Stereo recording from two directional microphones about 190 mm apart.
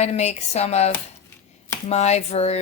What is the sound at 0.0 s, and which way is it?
Speech, 35° left (ahead or behind).